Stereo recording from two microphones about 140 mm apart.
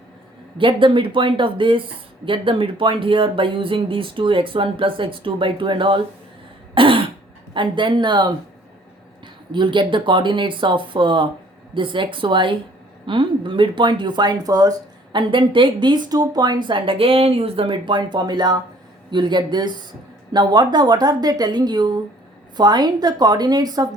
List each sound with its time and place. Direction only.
0.6 s speech: 35° right (ahead or behind)
6.7 s throat clearing: 40° right (ahead or behind)
7.5 s speech: 35° right (ahead or behind)